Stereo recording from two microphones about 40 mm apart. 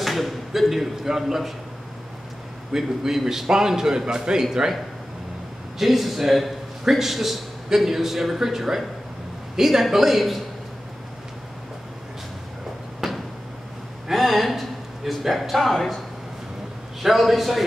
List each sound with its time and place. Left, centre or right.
0.0 s a sound: centre
0.5 s a man's voice: centre
2.7 s a man's voice: centre
5.8 s a man's voice: centre
13.0 s a sound: centre
14.0 s speech: centre
17.0 s speech: centre